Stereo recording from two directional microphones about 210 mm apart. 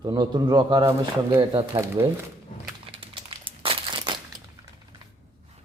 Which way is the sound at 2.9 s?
25° right (ahead or behind).